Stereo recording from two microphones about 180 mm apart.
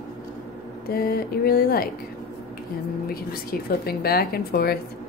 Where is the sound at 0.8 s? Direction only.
60° left (ahead or behind).